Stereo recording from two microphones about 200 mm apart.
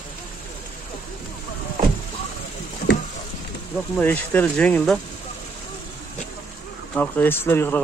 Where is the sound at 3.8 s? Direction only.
10° left (ahead or behind).